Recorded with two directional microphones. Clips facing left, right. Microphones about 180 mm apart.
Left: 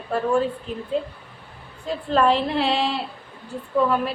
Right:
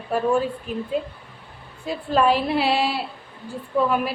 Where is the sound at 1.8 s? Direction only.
10° right (ahead or behind).